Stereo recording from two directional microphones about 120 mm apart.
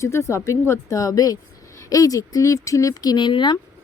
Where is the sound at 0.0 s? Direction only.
25° left (ahead or behind).